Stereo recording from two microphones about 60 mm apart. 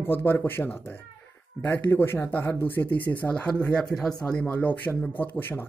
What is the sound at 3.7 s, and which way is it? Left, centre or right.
A man's voice, centre.